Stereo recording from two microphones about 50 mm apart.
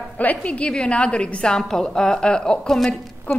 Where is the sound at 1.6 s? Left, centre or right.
Centre.